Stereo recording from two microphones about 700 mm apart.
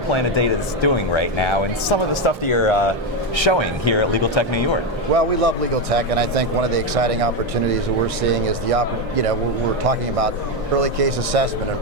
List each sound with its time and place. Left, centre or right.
0.1 s speech: left
5.1 s speech: right